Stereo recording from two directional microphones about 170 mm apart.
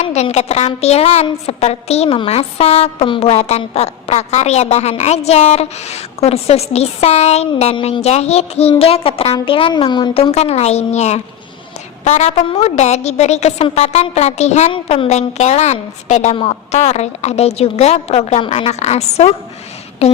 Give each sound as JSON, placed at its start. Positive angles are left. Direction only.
{"t": 0.0, "sound": "a woman's voice", "side_deg": 40}
{"t": 10.3, "sound": "a woman's voice", "side_deg": 40}